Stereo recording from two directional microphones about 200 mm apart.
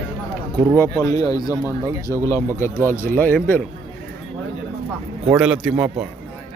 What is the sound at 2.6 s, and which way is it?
Speech, 10° left (ahead or behind).